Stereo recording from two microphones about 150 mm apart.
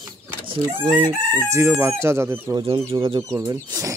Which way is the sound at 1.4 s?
20° right (ahead or behind).